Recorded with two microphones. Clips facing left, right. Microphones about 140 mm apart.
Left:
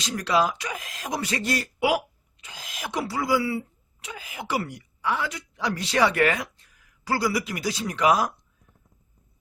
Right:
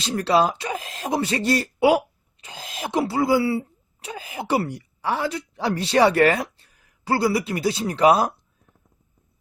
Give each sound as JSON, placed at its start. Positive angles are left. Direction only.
{"t": 0.0, "sound": "a woman's voice", "side_deg": -30}